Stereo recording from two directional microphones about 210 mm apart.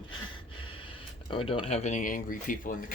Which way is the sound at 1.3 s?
25° left (ahead or behind).